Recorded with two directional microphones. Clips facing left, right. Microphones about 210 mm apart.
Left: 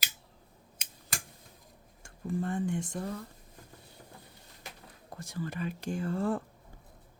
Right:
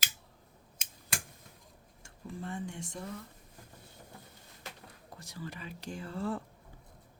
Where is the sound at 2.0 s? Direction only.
50° left (ahead or behind).